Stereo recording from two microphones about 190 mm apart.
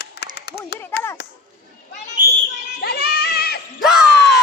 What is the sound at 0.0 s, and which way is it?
Clapping, 60° left (ahead or behind).